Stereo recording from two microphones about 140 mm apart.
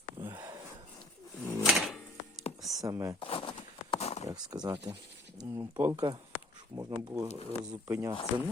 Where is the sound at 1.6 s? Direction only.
Centre (ahead or behind).